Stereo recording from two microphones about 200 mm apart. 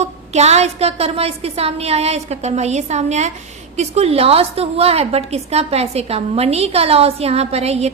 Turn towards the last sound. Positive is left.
turn(degrees=-30)  # may be behind; listen again after turning